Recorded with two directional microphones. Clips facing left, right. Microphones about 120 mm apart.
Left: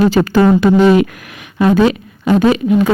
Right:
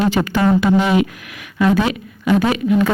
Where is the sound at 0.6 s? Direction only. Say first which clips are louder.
Left 6 dB; 10° right (ahead or behind).